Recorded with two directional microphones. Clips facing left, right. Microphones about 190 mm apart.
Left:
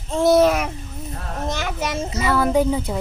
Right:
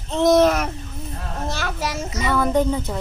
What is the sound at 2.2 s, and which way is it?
Speech, 5° left (ahead or behind).